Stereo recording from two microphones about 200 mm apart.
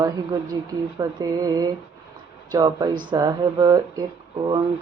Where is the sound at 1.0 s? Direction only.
20° right (ahead or behind).